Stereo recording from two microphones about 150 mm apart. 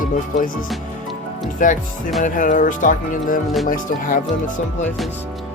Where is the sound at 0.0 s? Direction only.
65° left (ahead or behind).